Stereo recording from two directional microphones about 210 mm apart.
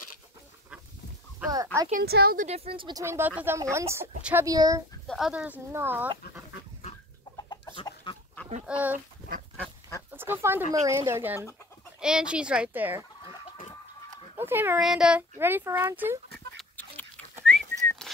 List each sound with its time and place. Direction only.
1.5 s speech: 15° right (ahead or behind)
1.9 s a woman's voice: 45° right (ahead or behind)
2.4 s speech: 30° right (ahead or behind)
5.0 s speech: centre (ahead or behind)
7.3 s chicken: 20° left (ahead or behind)
8.6 s speech: 5° right (ahead or behind)
9.6 s duck: 10° left (ahead or behind)
10.1 s speech: 10° right (ahead or behind)
14.3 s speech: 10° right (ahead or behind)
16.5 s a sound: 5° left (ahead or behind)
17.5 s whistling: 5° left (ahead or behind)